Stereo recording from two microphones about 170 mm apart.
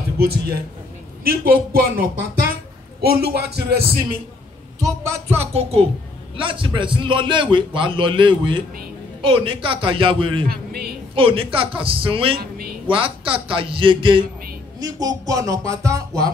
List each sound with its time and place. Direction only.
1.2 s a woman's voice: 60° right (ahead or behind)
5.4 s a man's voice: 35° right (ahead or behind)
10.5 s speech: 65° right (ahead or behind)
11.1 s a man's voice: 30° right (ahead or behind)
12.4 s a woman's voice: 65° right (ahead or behind)
12.8 s a man's voice: 30° right (ahead or behind)